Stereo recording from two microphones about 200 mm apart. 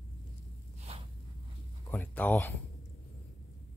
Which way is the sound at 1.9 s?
10° left (ahead or behind).